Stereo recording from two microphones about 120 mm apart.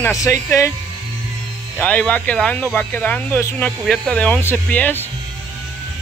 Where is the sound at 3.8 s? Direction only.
10° left (ahead or behind).